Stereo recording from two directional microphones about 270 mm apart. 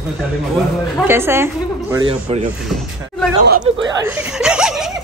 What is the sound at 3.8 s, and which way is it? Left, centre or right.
Speech, centre.